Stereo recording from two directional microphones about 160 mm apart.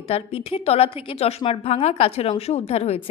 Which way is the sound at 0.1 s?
35° left (ahead or behind).